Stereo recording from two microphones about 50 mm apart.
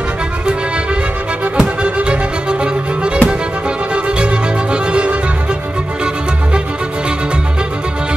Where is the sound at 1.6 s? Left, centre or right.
Right.